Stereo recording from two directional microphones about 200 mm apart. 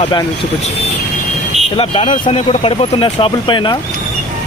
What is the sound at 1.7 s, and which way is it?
Speech, 25° left (ahead or behind).